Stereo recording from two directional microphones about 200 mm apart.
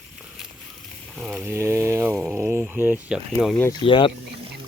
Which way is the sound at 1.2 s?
5° right (ahead or behind).